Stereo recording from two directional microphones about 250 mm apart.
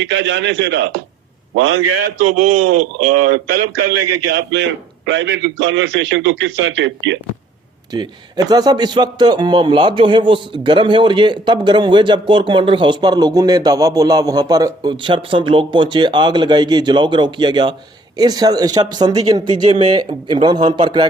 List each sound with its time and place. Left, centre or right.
0.0 s a man's voice: right
1.5 s a man's voice: right
4.5 s a man's voice: right
7.9 s a man's voice: centre